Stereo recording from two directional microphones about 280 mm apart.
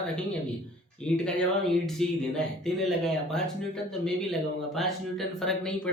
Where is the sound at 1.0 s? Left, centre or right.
Centre.